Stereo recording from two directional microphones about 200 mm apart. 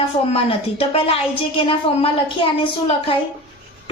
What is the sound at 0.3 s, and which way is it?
A woman's voice, 30° left (ahead or behind).